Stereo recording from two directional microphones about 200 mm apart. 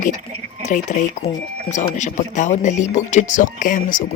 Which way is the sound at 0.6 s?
35° left (ahead or behind).